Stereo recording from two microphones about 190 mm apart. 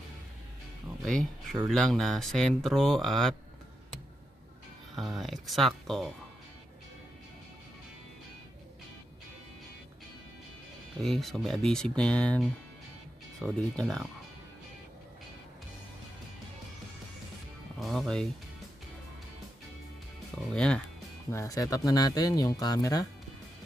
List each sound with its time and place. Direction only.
1.0 s speech: 5° left (ahead or behind)
4.9 s speech: centre (ahead or behind)
11.0 s speech: centre (ahead or behind)
17.7 s speech: centre (ahead or behind)
20.5 s speech: 5° left (ahead or behind)
21.3 s speech: 15° left (ahead or behind)